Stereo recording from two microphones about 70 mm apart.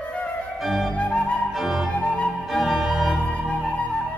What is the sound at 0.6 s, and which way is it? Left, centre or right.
Flute, centre.